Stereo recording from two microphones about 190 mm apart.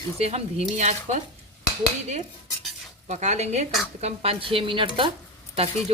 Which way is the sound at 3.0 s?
40° right (ahead or behind).